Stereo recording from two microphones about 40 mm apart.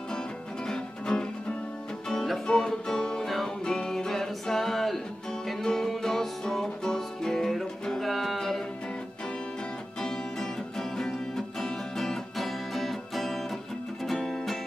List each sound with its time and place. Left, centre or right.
0.7 s music: centre
3.3 s music: centre
3.6 s music: centre
8.0 s music: centre
9.9 s music: centre